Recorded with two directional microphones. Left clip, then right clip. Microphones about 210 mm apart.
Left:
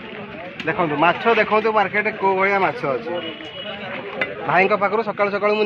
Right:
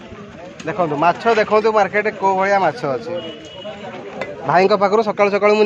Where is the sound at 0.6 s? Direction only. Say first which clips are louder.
Right 1 dB; 50° right (ahead or behind).